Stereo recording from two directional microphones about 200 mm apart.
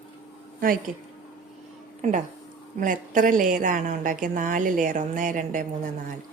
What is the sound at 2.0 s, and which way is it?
A woman's voice, 40° right (ahead or behind).